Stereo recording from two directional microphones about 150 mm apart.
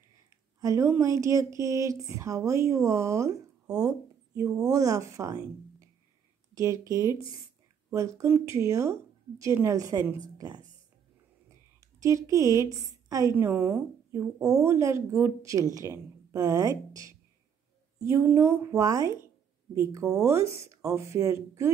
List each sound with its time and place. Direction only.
0.6 s a woman's voice: 20° right (ahead or behind)
6.5 s a woman's voice: 20° right (ahead or behind)
11.8 s a woman's voice: 20° right (ahead or behind)